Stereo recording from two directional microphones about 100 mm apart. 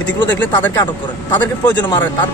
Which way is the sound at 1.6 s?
45° left (ahead or behind).